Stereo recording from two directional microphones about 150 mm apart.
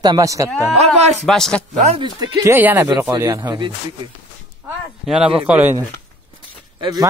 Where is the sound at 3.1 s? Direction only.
25° right (ahead or behind).